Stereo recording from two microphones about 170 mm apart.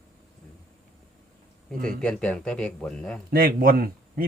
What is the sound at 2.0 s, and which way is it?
Speech, 5° left (ahead or behind).